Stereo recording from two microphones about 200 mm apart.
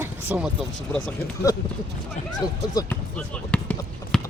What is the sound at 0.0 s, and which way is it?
Vehicle, 5° right (ahead or behind).